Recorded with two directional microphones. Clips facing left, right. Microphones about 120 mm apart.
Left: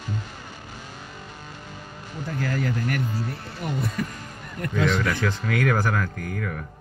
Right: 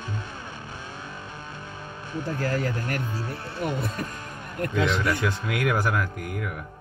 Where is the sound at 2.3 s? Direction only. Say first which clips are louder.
Left 2 dB; 40° right (ahead or behind).